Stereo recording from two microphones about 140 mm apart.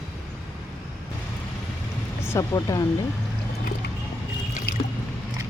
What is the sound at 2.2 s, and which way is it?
Speech, 25° left (ahead or behind).